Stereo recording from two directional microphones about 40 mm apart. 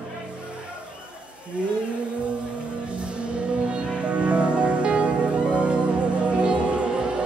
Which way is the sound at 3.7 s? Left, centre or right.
Right.